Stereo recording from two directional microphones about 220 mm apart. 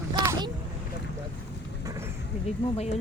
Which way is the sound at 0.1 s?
20° right (ahead or behind).